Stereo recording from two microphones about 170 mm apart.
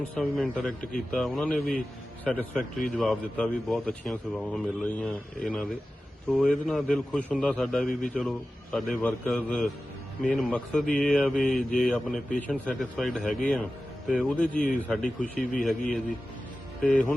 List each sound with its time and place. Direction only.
0.2 s speech: 5° left (ahead or behind)
14.1 s speech: 5° right (ahead or behind)
14.3 s speech: 10° left (ahead or behind)
15.2 s a man's voice: 50° left (ahead or behind)